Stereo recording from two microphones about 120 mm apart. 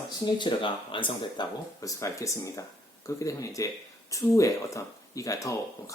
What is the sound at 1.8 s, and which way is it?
Speech, 25° left (ahead or behind).